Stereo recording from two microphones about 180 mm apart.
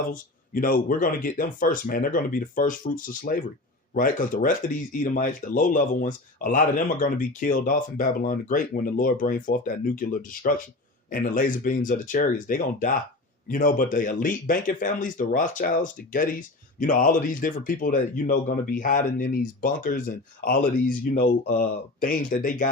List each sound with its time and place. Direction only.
0.1 s speech: 50° left (ahead or behind)